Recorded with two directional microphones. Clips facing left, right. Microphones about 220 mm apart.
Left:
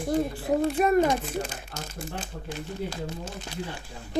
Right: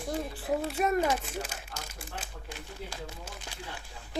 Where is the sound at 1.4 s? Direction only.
10° right (ahead or behind).